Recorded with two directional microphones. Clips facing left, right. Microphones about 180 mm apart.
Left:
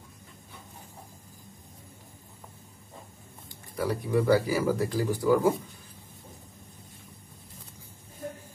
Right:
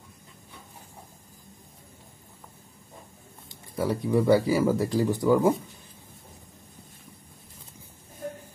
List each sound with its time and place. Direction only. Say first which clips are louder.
3.4 s speech: right 2 dB; 20° right (ahead or behind)